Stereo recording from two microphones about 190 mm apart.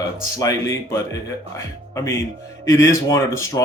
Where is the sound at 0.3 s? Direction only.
15° left (ahead or behind).